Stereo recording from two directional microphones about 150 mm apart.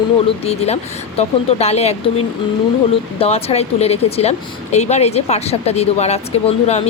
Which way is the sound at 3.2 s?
40° left (ahead or behind).